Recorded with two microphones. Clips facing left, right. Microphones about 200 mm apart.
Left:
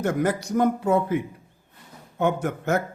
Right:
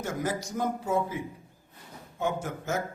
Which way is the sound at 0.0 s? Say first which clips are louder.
Left 8 dB; 60° left (ahead or behind).